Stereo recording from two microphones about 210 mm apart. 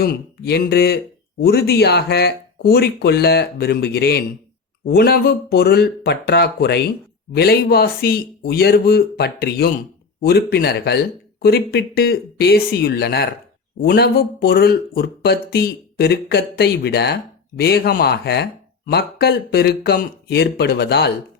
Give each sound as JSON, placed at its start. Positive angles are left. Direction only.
{"t": 0.0, "sound": "speech", "side_deg": 50}